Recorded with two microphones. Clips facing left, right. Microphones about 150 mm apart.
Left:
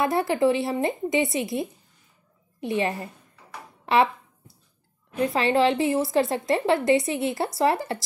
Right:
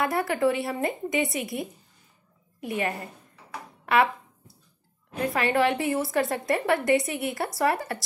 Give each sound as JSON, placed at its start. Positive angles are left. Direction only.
{"t": 0.0, "sound": "a woman's voice", "side_deg": 25}
{"t": 5.2, "sound": "a woman's voice", "side_deg": 25}